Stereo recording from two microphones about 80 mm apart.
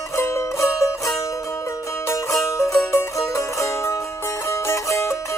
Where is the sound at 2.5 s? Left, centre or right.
Left.